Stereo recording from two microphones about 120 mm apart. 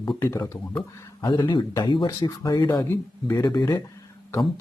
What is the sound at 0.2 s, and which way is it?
Speech, 25° left (ahead or behind).